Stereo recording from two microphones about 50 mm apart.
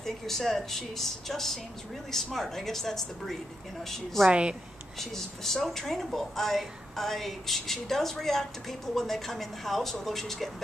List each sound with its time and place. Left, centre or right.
0.0 s a woman's voice: centre
4.3 s a woman's voice: right
4.9 s speech: centre